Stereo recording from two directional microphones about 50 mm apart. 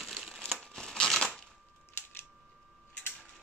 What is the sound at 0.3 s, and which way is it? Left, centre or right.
Crumpling, centre.